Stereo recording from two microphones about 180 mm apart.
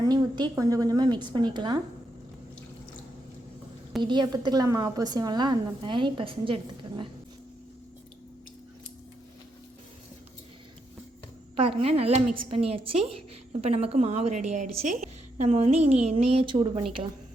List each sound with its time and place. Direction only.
0.0 s a woman's voice: 20° right (ahead or behind)
4.0 s a woman's voice: 25° right (ahead or behind)
11.5 s a woman's voice: 30° right (ahead or behind)